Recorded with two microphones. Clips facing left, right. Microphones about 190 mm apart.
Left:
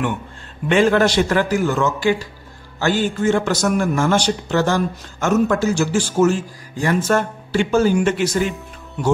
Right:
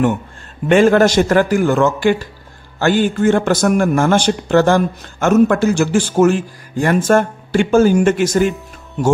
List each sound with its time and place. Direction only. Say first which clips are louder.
0.7 s a man's voice: right 4 dB; 45° right (ahead or behind)